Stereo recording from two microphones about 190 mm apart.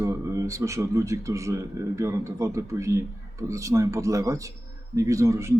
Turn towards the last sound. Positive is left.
turn(degrees=-15)  # may be behind; listen again after turning